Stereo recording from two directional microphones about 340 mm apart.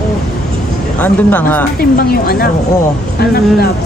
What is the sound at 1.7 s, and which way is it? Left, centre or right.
Speech, left.